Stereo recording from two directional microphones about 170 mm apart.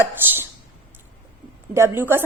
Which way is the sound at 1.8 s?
15° right (ahead or behind).